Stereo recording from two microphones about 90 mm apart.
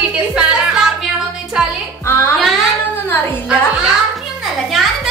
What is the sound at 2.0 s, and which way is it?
Speech, 30° left (ahead or behind).